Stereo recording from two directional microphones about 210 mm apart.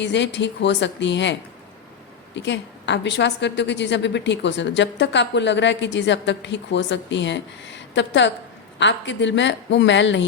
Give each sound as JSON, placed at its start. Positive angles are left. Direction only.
{"t": 0.0, "sound": "a woman's voice", "side_deg": 55}